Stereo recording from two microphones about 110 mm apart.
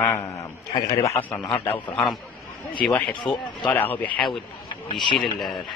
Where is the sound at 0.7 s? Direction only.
35° left (ahead or behind).